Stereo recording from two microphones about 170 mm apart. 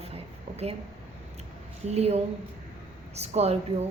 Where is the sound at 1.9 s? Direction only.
40° right (ahead or behind).